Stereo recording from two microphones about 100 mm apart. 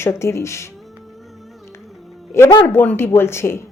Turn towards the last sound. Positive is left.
turn(degrees=25)  # may be behind; listen again after turning